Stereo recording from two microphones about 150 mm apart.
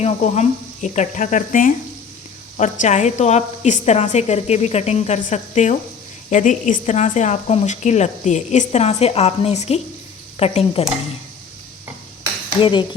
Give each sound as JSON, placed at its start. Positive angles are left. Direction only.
{"t": 0.0, "sound": "speech", "side_deg": 50}
{"t": 12.5, "sound": "speech", "side_deg": 35}